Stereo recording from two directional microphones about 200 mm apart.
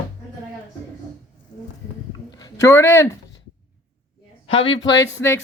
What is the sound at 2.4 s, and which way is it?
Speech, 15° left (ahead or behind).